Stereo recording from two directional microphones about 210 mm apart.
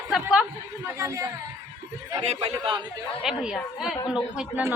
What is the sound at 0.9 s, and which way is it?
Speech, 15° right (ahead or behind).